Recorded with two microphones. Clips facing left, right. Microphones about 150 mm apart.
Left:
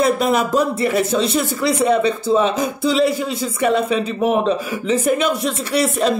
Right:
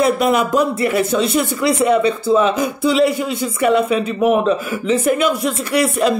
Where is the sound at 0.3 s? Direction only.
40° left (ahead or behind).